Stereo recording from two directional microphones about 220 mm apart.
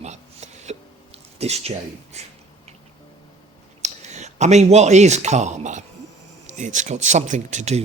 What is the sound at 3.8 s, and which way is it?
A man's voice, 30° right (ahead or behind).